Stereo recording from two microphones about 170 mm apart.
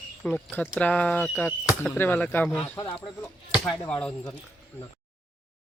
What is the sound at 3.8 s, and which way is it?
Speech, 5° left (ahead or behind).